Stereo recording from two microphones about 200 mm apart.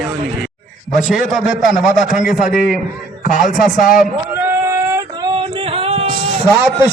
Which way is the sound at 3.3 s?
40° left (ahead or behind).